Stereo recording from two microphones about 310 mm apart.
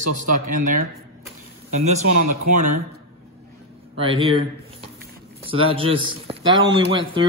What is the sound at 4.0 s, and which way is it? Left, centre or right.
Speech, centre.